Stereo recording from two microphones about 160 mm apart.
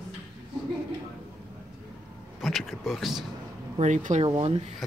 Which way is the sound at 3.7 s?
50° right (ahead or behind).